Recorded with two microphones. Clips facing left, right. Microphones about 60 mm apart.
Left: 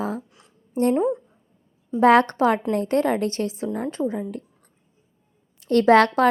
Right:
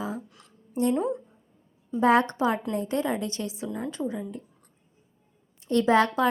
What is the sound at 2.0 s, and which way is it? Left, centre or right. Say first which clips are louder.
A woman's voice: left 6 dB; left.